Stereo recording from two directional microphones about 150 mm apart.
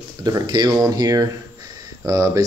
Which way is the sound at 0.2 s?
30° right (ahead or behind).